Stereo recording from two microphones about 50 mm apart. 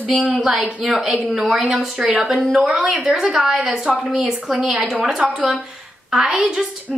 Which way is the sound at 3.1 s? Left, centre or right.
Centre.